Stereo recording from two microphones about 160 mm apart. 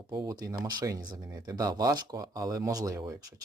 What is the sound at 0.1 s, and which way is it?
Speech, 20° right (ahead or behind).